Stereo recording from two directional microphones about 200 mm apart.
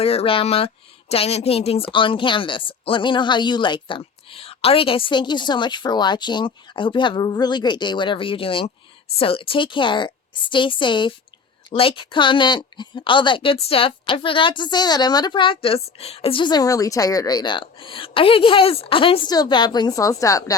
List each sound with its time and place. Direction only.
0.0 s a woman's voice: 30° left (ahead or behind)